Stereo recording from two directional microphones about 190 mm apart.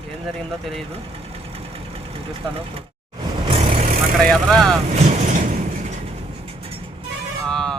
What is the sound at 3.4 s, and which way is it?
Vehicle, 30° right (ahead or behind).